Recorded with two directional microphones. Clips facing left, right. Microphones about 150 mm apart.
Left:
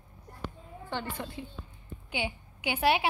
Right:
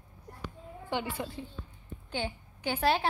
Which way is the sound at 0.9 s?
10° right (ahead or behind).